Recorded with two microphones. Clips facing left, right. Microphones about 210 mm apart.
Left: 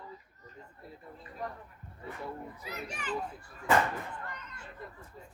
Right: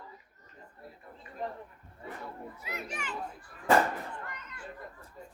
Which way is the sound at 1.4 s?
25° right (ahead or behind).